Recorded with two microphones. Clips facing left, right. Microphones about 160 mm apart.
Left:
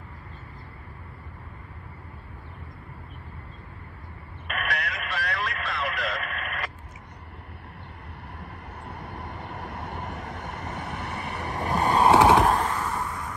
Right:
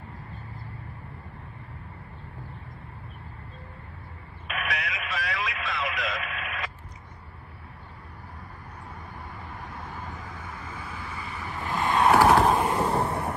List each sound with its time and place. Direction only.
4.5 s radio: 5° right (ahead or behind)
8.8 s vehicle: 75° left (ahead or behind)
11.6 s skateboard: 40° left (ahead or behind)
12.1 s vehicle: 20° left (ahead or behind)
12.5 s a sound: 15° right (ahead or behind)
12.8 s vehicle: 35° right (ahead or behind)